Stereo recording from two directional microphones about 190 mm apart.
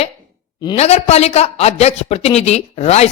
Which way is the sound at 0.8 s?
35° left (ahead or behind).